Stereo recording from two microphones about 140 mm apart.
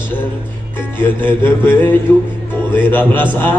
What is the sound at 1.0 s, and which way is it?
Music, 15° left (ahead or behind).